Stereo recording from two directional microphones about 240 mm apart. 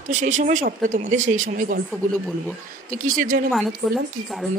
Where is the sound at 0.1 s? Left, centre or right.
Right.